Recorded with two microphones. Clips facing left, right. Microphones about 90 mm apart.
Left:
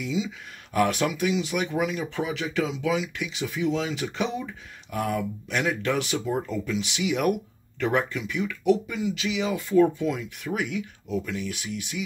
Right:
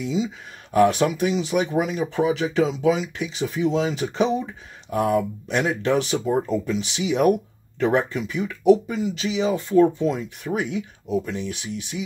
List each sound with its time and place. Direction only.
0.0 s speech: 40° right (ahead or behind)
4.0 s speech: 25° right (ahead or behind)